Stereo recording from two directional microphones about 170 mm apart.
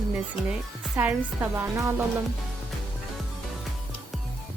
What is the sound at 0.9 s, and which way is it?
A woman's voice, 10° right (ahead or behind).